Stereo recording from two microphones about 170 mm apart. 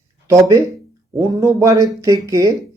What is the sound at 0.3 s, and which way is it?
Speech, 20° right (ahead or behind).